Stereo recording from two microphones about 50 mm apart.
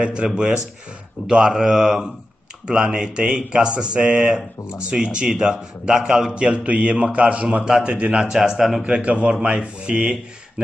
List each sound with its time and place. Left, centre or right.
0.0 s a man's voice: right
6.3 s speech: right
8.3 s speech: centre
8.8 s speech: right